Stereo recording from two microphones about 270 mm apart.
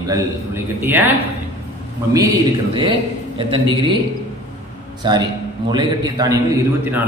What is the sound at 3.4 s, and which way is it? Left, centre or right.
Speech, centre.